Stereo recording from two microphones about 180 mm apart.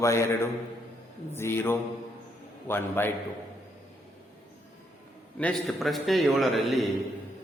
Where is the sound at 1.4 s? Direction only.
15° left (ahead or behind).